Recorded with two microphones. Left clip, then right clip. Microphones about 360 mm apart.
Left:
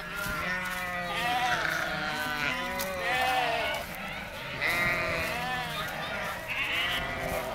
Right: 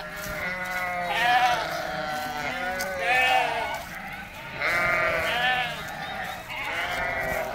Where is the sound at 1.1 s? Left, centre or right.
Right.